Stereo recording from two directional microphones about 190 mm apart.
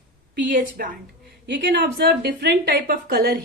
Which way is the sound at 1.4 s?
65° right (ahead or behind).